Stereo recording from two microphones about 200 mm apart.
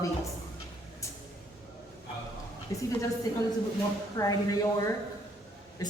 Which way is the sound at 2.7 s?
15° left (ahead or behind).